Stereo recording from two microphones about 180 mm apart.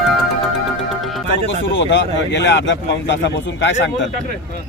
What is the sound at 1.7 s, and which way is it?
A man's voice, 85° left.